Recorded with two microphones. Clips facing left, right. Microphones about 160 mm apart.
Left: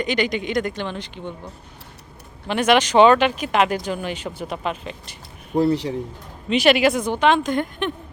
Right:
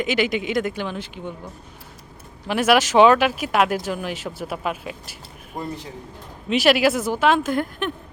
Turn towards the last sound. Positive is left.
turn(degrees=0)  # may be behind; listen again after turning